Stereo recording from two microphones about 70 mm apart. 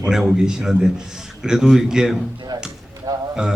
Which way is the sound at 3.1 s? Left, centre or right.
Right.